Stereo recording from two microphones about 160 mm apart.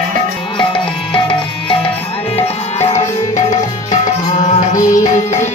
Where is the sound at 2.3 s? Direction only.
40° left (ahead or behind).